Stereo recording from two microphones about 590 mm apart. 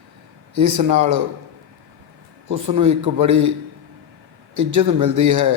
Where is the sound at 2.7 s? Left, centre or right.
Right.